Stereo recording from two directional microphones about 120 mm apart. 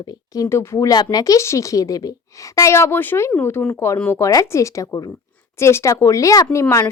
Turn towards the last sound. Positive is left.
turn(degrees=25)  # may be behind; listen again after turning